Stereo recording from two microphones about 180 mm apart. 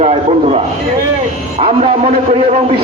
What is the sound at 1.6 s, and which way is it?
A man's voice, 35° right (ahead or behind).